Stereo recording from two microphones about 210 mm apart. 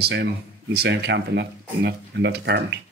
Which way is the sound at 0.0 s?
50° right (ahead or behind).